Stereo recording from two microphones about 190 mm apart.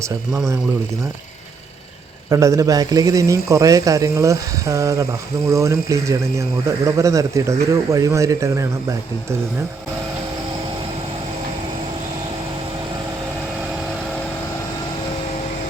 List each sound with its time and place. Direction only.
2.3 s speech: 15° right (ahead or behind)